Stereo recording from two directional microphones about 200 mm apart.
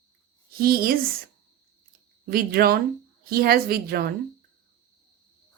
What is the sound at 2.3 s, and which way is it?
A woman's voice, 50° right (ahead or behind).